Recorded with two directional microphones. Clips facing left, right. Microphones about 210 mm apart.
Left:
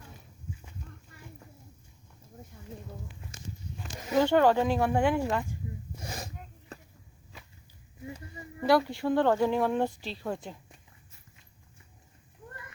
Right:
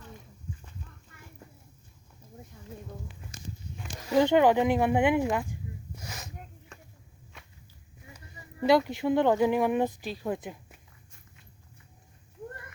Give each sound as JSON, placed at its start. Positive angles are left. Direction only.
{"t": 4.1, "sound": "speech", "side_deg": -20}
{"t": 6.0, "sound": "a sound", "side_deg": 30}
{"t": 8.9, "sound": "speech", "side_deg": -20}